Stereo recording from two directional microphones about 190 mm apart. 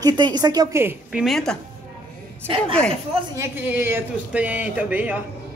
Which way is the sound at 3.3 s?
15° right (ahead or behind).